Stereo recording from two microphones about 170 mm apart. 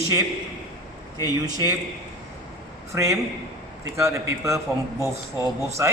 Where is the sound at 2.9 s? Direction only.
15° right (ahead or behind).